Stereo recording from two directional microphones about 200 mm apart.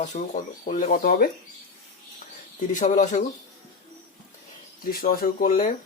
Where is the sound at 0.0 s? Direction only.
40° left (ahead or behind).